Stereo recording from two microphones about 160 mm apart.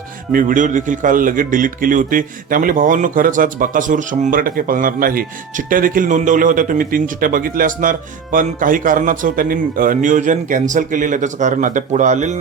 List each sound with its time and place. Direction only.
0.3 s a man's voice: 60° right (ahead or behind)